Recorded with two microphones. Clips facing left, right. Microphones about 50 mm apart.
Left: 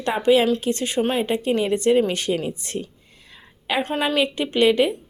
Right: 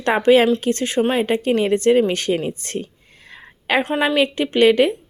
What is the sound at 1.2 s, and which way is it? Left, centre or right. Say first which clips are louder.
A woman's voice: right 3 dB; right.